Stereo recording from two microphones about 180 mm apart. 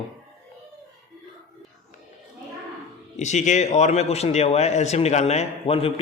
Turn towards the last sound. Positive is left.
turn(degrees=30)  # may be behind; listen again after turning